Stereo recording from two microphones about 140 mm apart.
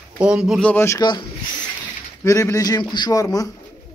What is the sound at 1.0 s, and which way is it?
A man's voice, 30° left (ahead or behind).